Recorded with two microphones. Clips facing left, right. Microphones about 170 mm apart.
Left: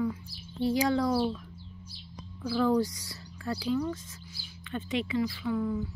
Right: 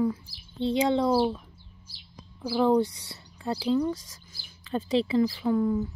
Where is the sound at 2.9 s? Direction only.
25° right (ahead or behind).